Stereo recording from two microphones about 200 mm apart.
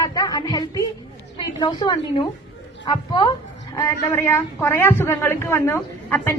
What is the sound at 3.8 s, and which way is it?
A woman's voice, 10° left (ahead or behind).